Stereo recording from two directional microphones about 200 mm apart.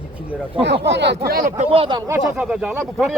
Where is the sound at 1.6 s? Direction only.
30° right (ahead or behind).